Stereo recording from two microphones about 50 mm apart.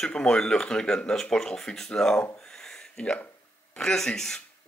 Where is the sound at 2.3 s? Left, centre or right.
Centre.